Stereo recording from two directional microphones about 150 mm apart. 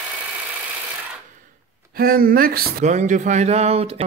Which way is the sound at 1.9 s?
80° right.